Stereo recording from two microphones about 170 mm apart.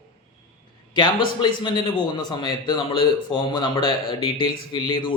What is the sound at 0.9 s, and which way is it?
A man's voice, 25° left (ahead or behind).